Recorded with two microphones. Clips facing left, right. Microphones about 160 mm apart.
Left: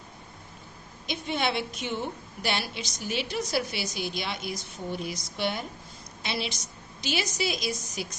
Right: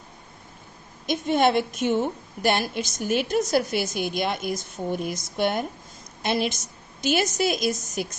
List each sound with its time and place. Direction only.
1.0 s a woman's voice: 45° right (ahead or behind)